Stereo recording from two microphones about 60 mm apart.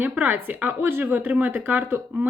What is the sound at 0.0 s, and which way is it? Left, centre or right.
A woman's voice, right.